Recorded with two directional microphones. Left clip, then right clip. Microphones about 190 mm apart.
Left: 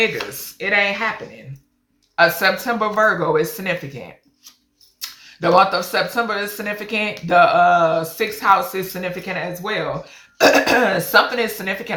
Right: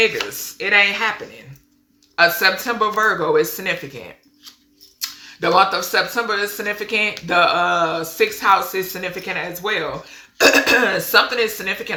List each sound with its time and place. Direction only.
0.2 s speech: 15° right (ahead or behind)
2.1 s speech: 5° right (ahead or behind)
4.9 s speech: 10° right (ahead or behind)